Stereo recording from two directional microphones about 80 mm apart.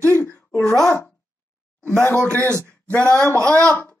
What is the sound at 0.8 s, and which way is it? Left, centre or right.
Speech, centre.